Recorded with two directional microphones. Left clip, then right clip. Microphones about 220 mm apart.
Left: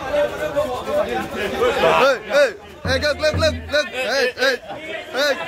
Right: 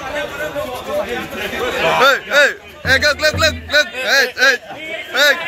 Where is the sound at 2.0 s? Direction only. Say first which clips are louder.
Right 4 dB; centre (ahead or behind).